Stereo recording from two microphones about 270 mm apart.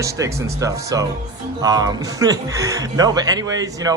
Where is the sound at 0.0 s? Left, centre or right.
Centre.